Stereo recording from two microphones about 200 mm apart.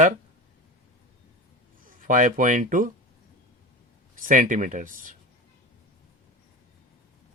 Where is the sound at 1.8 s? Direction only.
40° right (ahead or behind).